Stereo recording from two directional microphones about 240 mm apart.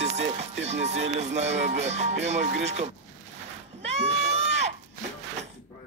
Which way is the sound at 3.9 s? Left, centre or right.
Right.